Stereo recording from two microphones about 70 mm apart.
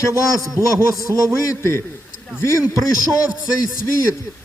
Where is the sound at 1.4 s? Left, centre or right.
Left.